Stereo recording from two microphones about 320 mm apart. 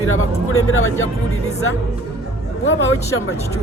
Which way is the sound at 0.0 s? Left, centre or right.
Left.